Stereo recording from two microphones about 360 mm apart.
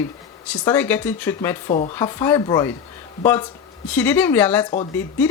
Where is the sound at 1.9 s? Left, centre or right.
Centre.